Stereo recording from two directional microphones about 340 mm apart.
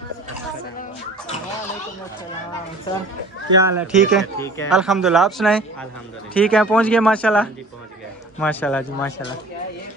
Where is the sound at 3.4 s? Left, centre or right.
Centre.